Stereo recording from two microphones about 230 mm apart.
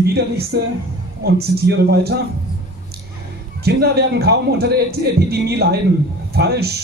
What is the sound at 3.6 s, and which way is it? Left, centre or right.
A man's voice, right.